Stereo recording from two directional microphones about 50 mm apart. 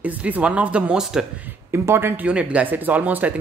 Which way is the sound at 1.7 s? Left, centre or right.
Right.